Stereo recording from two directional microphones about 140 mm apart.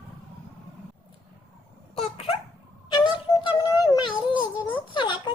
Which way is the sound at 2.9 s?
35° left (ahead or behind).